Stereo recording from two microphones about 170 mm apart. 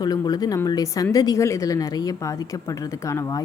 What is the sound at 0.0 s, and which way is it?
A woman's voice, 25° left (ahead or behind).